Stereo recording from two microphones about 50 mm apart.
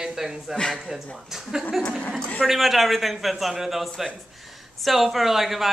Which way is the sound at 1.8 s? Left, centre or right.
Centre.